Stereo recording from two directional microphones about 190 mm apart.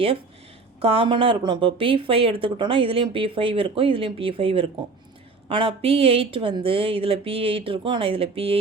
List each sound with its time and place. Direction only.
0.8 s speech: 30° right (ahead or behind)